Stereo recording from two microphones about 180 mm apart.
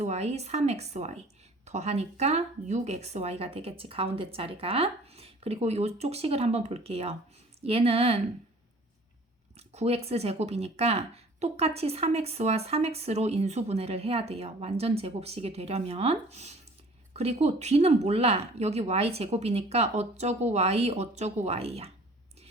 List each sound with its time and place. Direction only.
0.0 s speech: 40° right (ahead or behind)
9.6 s speech: 35° right (ahead or behind)